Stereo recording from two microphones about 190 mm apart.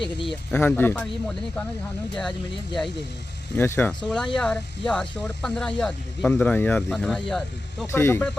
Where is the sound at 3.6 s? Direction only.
10° left (ahead or behind).